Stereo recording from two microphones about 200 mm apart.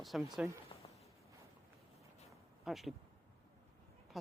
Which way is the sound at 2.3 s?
Centre (ahead or behind).